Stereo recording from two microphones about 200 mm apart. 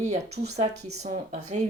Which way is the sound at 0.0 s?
35° right (ahead or behind).